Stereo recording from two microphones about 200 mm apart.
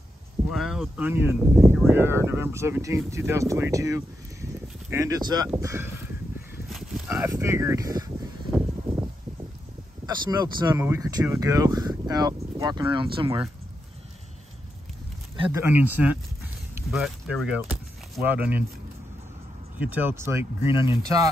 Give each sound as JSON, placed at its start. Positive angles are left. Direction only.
{"t": 0.5, "sound": "speech", "side_deg": 0}
{"t": 7.1, "sound": "speech", "side_deg": -15}
{"t": 10.0, "sound": "speech", "side_deg": -20}
{"t": 15.5, "sound": "speech", "side_deg": -10}
{"t": 19.8, "sound": "speech", "side_deg": -10}